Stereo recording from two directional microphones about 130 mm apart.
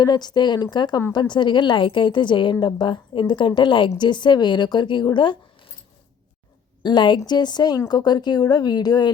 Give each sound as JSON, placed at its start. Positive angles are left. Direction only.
{"t": 0.0, "sound": "a woman's voice", "side_deg": 35}
{"t": 6.8, "sound": "a woman's voice", "side_deg": 35}